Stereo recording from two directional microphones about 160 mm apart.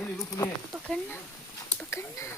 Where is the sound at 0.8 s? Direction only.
5° left (ahead or behind).